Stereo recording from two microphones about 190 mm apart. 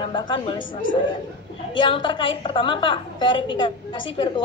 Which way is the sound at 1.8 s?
25° left (ahead or behind).